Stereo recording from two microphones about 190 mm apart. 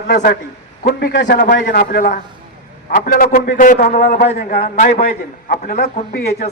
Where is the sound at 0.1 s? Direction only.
60° left (ahead or behind); by 4.2 s 35° left (ahead or behind).